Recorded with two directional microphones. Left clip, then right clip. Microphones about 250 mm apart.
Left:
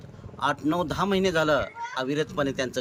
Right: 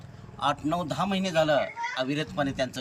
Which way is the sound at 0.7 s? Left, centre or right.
Left.